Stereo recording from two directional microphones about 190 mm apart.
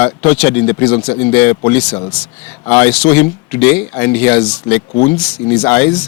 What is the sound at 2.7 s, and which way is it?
Speech, 10° left (ahead or behind).